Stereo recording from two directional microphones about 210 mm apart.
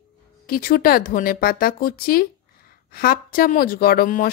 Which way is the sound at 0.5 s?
45° left (ahead or behind).